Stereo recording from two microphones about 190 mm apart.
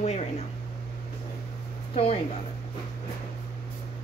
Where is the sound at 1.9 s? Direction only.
30° left (ahead or behind).